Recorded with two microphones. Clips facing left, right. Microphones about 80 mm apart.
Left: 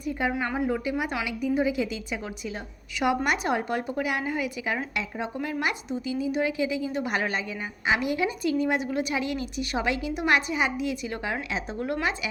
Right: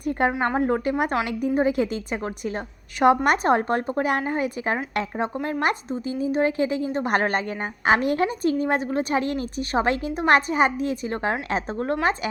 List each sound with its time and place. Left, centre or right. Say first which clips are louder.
0.0 s a woman's voice: right 5 dB; right